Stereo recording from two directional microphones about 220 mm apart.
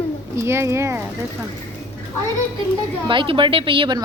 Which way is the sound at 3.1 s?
20° right (ahead or behind).